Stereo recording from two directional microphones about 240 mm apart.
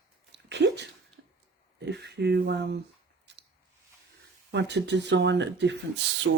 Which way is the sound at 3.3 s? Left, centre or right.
Right.